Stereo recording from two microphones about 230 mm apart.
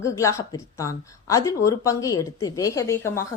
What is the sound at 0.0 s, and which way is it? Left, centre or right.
Speech, centre.